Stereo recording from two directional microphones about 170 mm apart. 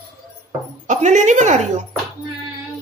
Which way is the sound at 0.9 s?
45° right (ahead or behind).